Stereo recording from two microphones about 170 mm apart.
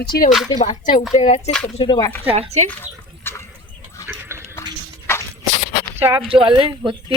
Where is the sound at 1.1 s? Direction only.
40° left (ahead or behind).